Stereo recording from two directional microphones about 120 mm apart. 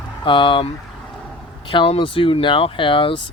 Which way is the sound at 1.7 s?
45° left (ahead or behind).